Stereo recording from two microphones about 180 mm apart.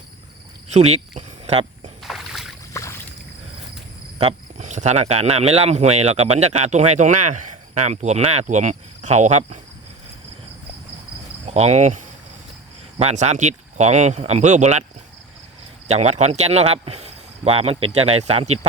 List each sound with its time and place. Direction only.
0.7 s speech: 40° right (ahead or behind)
2.0 s boat: centre (ahead or behind)
2.8 s boat: 15° left (ahead or behind)
4.2 s speech: 35° right (ahead or behind)
11.4 s cricket: 35° right (ahead or behind)
13.0 s speech: 40° right (ahead or behind)
15.9 s speech: 35° right (ahead or behind)